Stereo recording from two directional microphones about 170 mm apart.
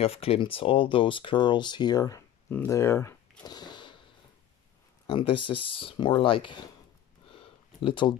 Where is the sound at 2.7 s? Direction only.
15° left (ahead or behind).